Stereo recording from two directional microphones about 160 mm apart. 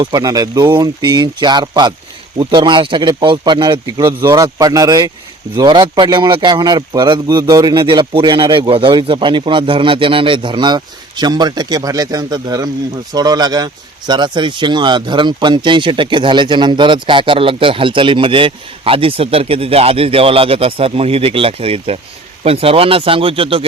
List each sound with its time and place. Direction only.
0.0 s speech: 25° right (ahead or behind)